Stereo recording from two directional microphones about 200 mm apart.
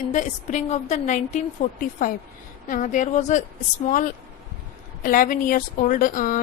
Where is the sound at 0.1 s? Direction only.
40° left (ahead or behind).